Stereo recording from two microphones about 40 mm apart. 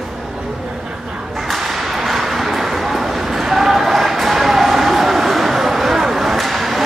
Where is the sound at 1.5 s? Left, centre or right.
Centre.